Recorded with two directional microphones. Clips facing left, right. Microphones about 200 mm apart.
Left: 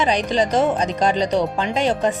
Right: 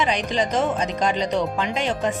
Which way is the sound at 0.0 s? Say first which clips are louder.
Left 4 dB; 35° left (ahead or behind).